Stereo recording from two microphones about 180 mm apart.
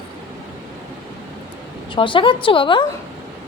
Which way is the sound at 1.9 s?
30° left (ahead or behind).